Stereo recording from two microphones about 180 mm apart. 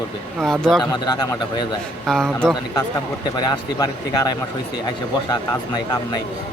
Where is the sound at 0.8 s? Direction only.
25° left (ahead or behind).